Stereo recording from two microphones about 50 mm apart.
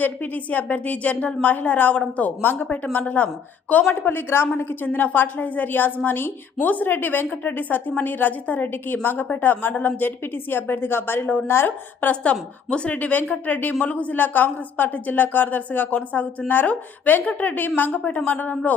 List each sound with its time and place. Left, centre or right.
0.0 s a woman's voice: left
3.8 s a woman's voice: left
12.2 s a woman's voice: left